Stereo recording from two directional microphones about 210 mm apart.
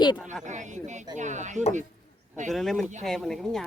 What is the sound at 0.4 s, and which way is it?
Speech, 35° right (ahead or behind).